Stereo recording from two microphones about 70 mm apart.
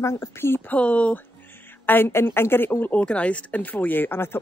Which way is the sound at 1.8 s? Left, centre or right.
Left.